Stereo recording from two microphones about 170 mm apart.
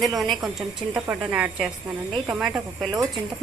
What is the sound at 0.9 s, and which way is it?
Speech, 10° right (ahead or behind).